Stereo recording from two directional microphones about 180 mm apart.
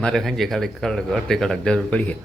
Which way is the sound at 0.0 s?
Centre (ahead or behind).